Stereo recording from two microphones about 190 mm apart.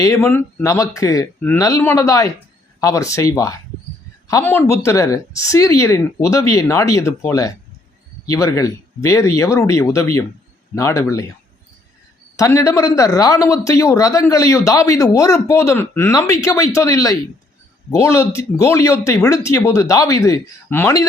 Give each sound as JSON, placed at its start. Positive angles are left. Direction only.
{"t": 0.0, "sound": "a man's voice", "side_deg": 15}
{"t": 12.4, "sound": "a man's voice", "side_deg": 15}